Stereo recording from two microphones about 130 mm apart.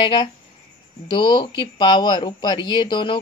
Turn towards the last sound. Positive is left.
turn(degrees=35)  # may be behind; listen again after turning